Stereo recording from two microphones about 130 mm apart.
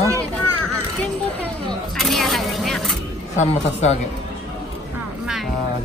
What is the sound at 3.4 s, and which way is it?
Speech, 60° left (ahead or behind).